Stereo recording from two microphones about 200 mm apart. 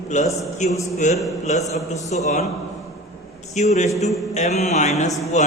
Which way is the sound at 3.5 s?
35° left (ahead or behind).